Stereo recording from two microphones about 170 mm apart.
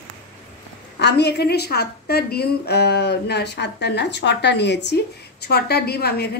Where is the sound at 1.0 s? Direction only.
75° left (ahead or behind).